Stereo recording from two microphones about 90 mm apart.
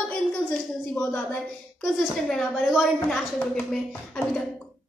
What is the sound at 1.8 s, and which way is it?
A woman's voice, 5° left (ahead or behind).